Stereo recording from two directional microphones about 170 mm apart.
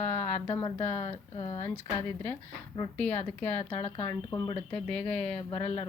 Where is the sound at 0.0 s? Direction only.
10° left (ahead or behind).